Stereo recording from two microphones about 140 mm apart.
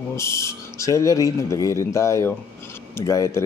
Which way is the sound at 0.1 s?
20° left (ahead or behind).